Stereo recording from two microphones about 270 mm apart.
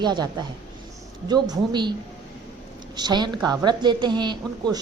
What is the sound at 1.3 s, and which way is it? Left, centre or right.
Speech, centre.